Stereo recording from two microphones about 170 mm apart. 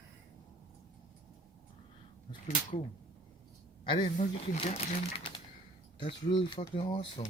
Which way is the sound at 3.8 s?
30° left (ahead or behind).